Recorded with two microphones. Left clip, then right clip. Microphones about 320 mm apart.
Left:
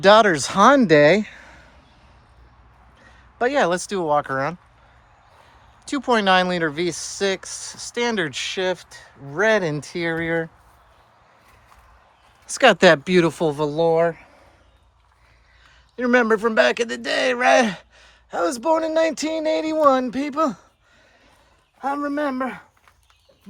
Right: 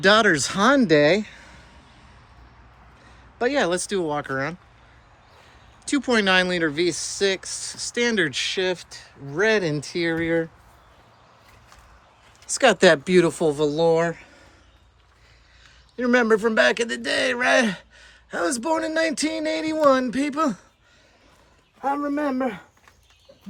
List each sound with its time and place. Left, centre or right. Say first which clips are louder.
0.0 s speech: left 3 dB; centre
3.0 s speech: left 2 dB; left
5.8 s speech: left 2 dB; centre
12.5 s speech: left 3 dB; left
16.0 s speech: left 1 dB; left
21.8 s a man's voice: even; left
22.2 s speech: left 1 dB; centre